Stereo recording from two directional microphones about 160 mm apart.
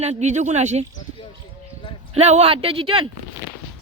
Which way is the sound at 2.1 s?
40° right (ahead or behind).